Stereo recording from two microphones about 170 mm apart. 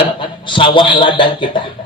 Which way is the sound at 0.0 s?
30° left (ahead or behind).